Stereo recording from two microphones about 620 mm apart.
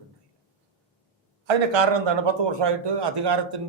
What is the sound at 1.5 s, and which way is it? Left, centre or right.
A man's voice, right.